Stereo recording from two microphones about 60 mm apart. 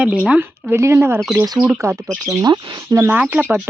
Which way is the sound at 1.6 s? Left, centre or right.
Right.